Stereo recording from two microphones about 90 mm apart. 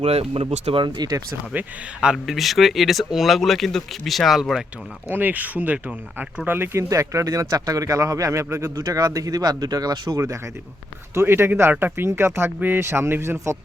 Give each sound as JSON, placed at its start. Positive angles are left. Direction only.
{"t": 0.0, "sound": "speech", "side_deg": -90}
{"t": 0.9, "sound": "speech", "side_deg": -50}
{"t": 1.5, "sound": "speech", "side_deg": -10}
{"t": 5.1, "sound": "speech", "side_deg": -20}
{"t": 11.1, "sound": "speech", "side_deg": -30}